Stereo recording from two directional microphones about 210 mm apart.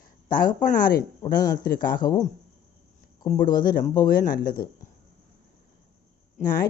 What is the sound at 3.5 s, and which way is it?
Speech, 40° left (ahead or behind).